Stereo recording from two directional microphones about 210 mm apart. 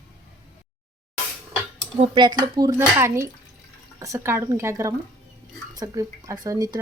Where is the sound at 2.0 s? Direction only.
20° right (ahead or behind).